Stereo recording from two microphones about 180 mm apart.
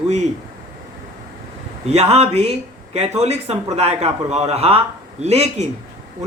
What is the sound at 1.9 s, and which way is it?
Speech, 35° right (ahead or behind).